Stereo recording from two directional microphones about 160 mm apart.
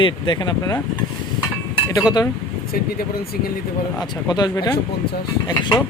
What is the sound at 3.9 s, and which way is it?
Speech, 25° left (ahead or behind).